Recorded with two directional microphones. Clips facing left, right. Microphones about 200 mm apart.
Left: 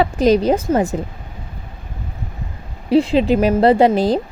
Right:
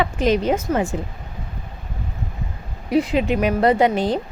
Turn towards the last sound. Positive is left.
turn(degrees=35)  # may be behind; listen again after turning